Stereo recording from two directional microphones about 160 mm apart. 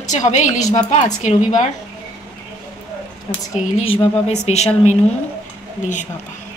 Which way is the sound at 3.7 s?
35° left (ahead or behind).